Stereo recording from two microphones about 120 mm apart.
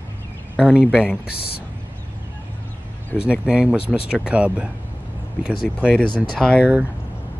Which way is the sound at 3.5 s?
10° right (ahead or behind).